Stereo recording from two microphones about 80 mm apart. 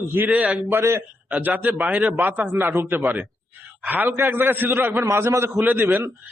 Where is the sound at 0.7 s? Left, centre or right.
Right.